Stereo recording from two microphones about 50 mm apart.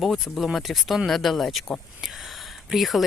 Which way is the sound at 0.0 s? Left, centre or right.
Centre.